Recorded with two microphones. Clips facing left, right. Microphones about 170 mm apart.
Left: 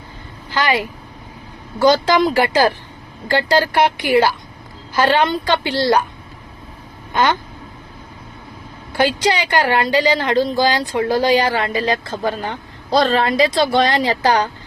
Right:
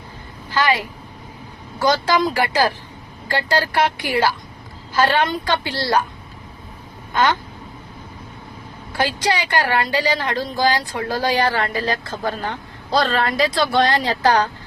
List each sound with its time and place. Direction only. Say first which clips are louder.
0.5 s a woman's voice: left 1 dB; 20° left (ahead or behind)
1.8 s a woman's voice: left 4 dB; 20° left (ahead or behind)
7.1 s speech: left 1 dB; 15° left (ahead or behind)
9.0 s a woman's voice: left 4 dB; 20° left (ahead or behind)